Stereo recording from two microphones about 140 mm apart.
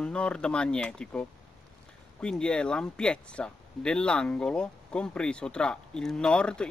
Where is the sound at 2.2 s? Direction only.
5° left (ahead or behind).